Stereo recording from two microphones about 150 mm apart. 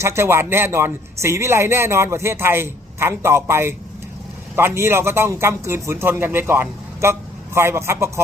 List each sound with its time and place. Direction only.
0.0 s a man's voice: 15° right (ahead or behind)